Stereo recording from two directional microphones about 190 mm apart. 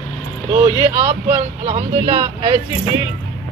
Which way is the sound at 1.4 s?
35° right (ahead or behind).